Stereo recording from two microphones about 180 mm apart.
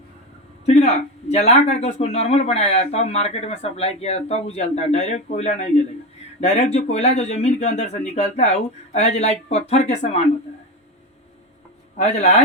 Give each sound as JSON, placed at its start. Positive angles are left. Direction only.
{"t": 0.6, "sound": "a sound", "side_deg": 35}
{"t": 1.8, "sound": "speech", "side_deg": 35}
{"t": 11.9, "sound": "speech", "side_deg": 35}